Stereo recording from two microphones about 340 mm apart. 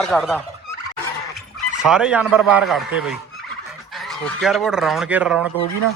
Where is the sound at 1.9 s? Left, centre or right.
Centre.